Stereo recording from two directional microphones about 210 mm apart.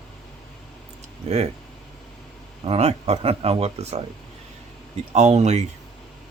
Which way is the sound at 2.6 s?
30° right (ahead or behind).